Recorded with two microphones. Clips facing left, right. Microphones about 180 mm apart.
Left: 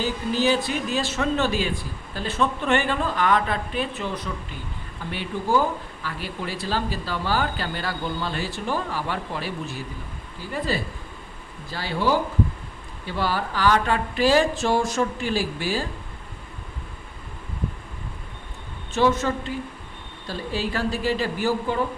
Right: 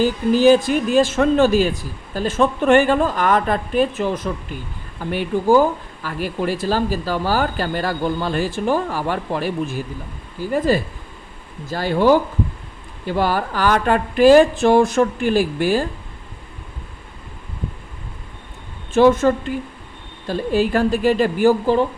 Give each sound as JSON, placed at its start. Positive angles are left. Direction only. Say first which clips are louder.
{"t": 0.4, "sound": "speech", "louder": "right 10 dB", "side_deg": -50}
{"t": 18.9, "sound": "speech", "louder": "right 8 dB", "side_deg": -50}